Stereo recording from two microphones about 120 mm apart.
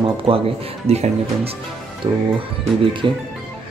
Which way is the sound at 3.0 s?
40° right (ahead or behind).